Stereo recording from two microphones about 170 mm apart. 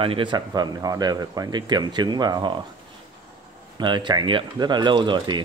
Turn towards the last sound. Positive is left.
turn(degrees=-25)  # may be behind; listen again after turning